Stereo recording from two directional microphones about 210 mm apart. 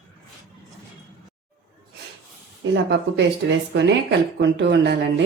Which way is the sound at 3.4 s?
55° right (ahead or behind).